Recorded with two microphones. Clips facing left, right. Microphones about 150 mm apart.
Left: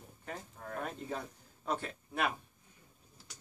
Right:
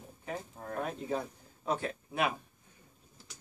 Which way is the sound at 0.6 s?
40° right (ahead or behind).